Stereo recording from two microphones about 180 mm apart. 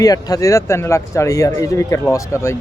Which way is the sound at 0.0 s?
20° left (ahead or behind).